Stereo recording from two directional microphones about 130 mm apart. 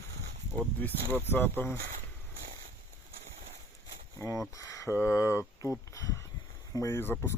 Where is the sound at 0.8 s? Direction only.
15° left (ahead or behind).